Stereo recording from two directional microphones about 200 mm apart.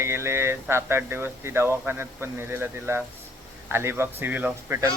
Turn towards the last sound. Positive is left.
turn(degrees=-10)  # may be behind; listen again after turning